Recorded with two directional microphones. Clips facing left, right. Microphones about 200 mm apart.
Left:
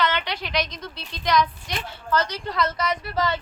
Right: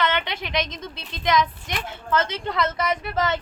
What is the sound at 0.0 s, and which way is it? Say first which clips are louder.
A woman's voice: even; 20° right (ahead or behind).